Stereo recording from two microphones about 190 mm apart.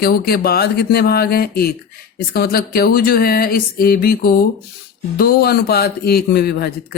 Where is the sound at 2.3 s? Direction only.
55° left (ahead or behind).